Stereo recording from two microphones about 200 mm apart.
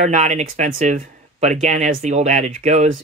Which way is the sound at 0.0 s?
35° right (ahead or behind).